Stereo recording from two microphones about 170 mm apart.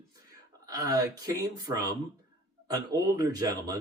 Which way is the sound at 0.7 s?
20° right (ahead or behind).